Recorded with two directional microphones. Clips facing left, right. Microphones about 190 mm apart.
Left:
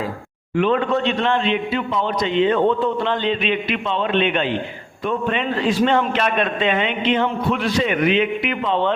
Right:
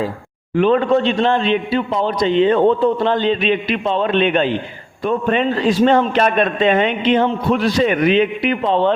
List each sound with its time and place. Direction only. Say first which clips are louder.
0.5 s a man's voice: right 4 dB; 35° right (ahead or behind)